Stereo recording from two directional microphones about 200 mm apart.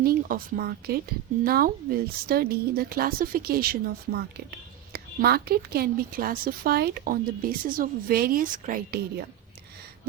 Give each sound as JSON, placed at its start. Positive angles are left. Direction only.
{"t": 0.0, "sound": "a woman's voice", "side_deg": -45}
{"t": 4.9, "sound": "a woman's voice", "side_deg": -50}